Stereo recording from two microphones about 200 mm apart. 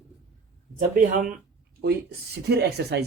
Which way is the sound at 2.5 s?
55° right (ahead or behind).